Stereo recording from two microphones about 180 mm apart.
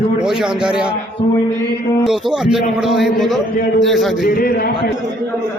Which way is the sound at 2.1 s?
Centre (ahead or behind).